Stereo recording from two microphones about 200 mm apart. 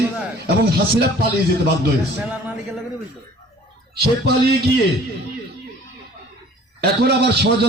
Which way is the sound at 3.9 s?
55° right (ahead or behind).